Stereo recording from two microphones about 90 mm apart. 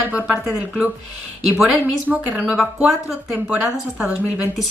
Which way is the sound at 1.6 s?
15° right (ahead or behind).